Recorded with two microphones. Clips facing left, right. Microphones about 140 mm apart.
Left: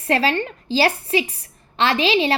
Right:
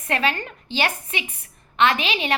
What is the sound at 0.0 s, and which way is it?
A woman's voice, 35° left (ahead or behind).